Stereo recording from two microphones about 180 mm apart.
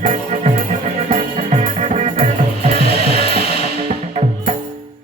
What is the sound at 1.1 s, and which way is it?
Music, 40° right (ahead or behind).